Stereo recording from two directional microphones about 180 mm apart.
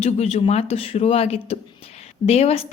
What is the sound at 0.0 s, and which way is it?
A woman's voice, 35° left (ahead or behind).